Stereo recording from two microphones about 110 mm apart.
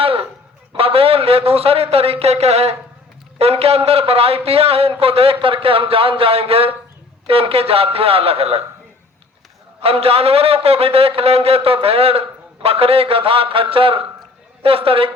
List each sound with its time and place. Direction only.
0.0 s a sound: 60° right (ahead or behind)
0.7 s a man's voice: 60° right (ahead or behind)
9.8 s a man's voice: 60° right (ahead or behind)